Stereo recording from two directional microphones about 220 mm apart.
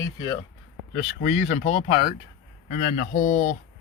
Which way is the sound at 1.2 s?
30° left (ahead or behind).